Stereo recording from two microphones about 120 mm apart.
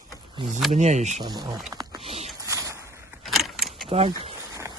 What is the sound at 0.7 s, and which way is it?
Speech, 75° right (ahead or behind).